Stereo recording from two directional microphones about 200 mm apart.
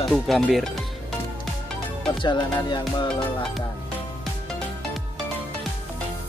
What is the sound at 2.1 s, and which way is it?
Music, 25° left (ahead or behind).